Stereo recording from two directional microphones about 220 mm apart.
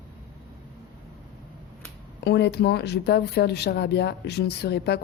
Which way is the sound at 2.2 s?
50° left (ahead or behind).